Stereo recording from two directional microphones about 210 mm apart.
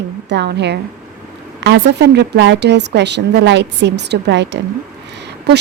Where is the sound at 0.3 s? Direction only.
55° right (ahead or behind).